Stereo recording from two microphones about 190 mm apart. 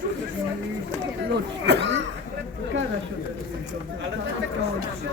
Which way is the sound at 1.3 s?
65° right (ahead or behind).